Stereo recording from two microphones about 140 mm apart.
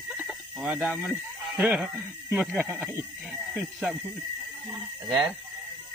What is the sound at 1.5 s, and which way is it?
Speech, 10° right (ahead or behind).